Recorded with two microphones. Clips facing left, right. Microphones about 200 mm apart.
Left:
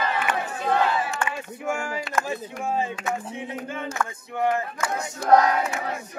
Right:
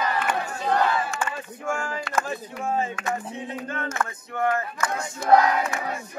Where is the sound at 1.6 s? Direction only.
10° left (ahead or behind).